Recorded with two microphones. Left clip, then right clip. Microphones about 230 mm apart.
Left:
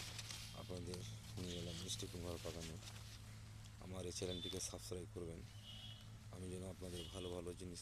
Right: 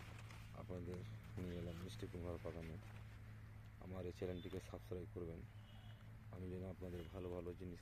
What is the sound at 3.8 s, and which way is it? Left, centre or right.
Speech, centre.